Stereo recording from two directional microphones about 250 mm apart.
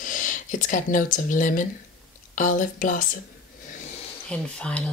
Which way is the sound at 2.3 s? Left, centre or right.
Left.